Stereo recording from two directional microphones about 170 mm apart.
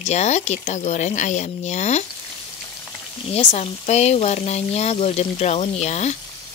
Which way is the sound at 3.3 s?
40° left (ahead or behind).